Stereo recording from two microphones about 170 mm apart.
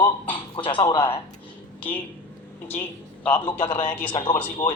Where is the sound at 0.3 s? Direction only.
30° left (ahead or behind).